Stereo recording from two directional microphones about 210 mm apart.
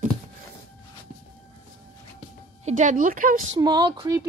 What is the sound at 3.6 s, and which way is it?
Speech, 20° right (ahead or behind).